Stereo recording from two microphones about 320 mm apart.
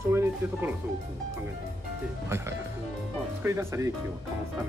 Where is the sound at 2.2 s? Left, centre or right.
Centre.